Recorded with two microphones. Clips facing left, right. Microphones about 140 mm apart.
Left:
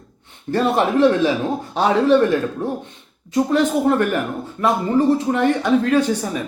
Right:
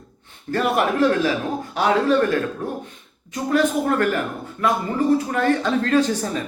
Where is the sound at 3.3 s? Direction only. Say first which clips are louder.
Left 3 dB; 25° left (ahead or behind).